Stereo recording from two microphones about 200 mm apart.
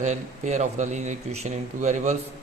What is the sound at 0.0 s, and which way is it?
Speech, 35° right (ahead or behind).